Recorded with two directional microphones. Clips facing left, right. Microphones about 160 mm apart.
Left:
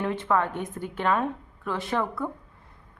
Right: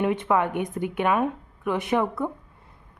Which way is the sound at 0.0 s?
15° right (ahead or behind).